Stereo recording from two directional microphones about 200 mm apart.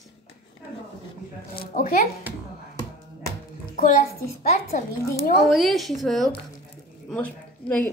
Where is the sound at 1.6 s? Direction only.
45° left (ahead or behind).